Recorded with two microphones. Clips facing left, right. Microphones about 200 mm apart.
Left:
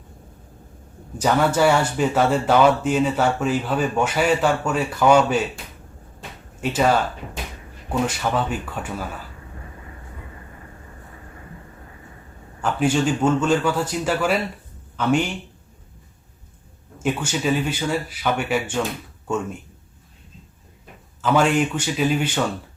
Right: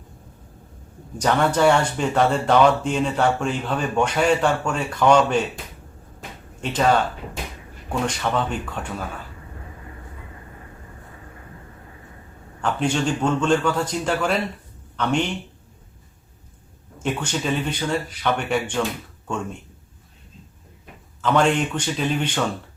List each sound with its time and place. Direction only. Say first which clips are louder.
1.2 s speech: even; 5° left (ahead or behind)
6.6 s speech: even; 5° left (ahead or behind)
8.0 s speech: right 1 dB; 5° left (ahead or behind)
12.6 s speech: left 2 dB; 5° left (ahead or behind)
17.0 s speech: left 2 dB; 5° left (ahead or behind)
21.2 s speech: left 1 dB; 5° left (ahead or behind)